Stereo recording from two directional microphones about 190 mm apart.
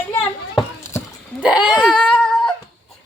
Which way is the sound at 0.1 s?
10° left (ahead or behind).